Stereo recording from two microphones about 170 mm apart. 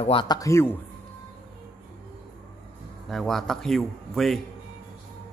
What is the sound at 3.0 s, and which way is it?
A man's voice, centre (ahead or behind).